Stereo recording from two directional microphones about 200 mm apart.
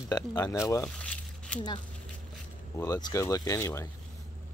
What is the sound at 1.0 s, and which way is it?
Coin, 5° left (ahead or behind).